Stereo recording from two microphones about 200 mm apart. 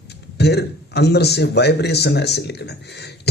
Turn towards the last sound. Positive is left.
turn(degrees=55)  # may be behind; listen again after turning